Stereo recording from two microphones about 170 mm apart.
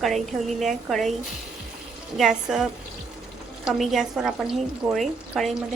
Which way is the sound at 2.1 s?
5° right (ahead or behind).